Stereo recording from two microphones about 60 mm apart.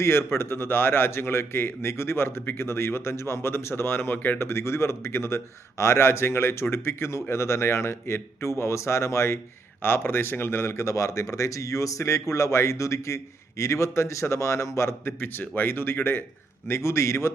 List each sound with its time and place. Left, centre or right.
0.0 s a man's voice: left
4.4 s a man's voice: left
15.0 s a man's voice: left